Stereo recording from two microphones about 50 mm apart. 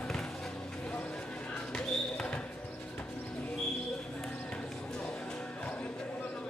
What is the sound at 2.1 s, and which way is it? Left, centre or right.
Basketball bounce, left.